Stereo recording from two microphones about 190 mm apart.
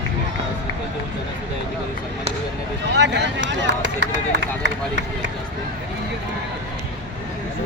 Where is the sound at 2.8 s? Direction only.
65° right (ahead or behind).